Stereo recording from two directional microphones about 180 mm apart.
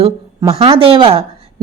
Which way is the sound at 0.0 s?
35° right (ahead or behind).